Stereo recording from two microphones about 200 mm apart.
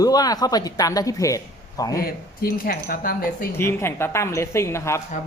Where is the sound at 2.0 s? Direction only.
45° left (ahead or behind).